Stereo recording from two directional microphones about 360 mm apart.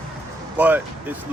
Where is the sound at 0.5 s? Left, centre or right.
Centre.